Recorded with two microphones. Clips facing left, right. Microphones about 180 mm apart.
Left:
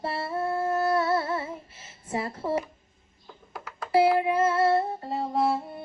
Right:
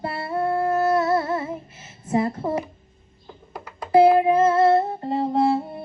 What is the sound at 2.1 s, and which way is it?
Speech, 30° right (ahead or behind).